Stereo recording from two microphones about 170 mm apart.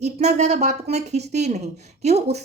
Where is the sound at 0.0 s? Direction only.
40° right (ahead or behind).